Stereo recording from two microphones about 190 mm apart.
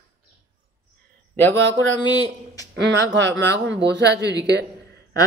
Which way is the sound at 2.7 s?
65° right (ahead or behind).